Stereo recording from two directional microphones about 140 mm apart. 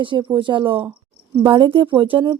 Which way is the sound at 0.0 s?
35° right (ahead or behind).